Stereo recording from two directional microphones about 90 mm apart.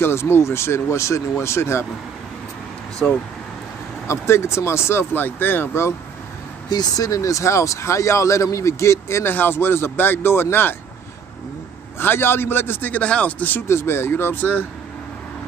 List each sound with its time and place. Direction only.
0.0 s speech: 25° left (ahead or behind)
4.1 s speech: 30° left (ahead or behind)
6.7 s speech: 45° left (ahead or behind); by 10.8 s 25° left (ahead or behind)
12.0 s speech: 25° left (ahead or behind)
13.7 s speech: 30° left (ahead or behind)